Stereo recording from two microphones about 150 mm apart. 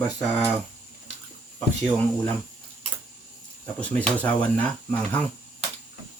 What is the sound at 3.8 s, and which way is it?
Speech, 10° left (ahead or behind).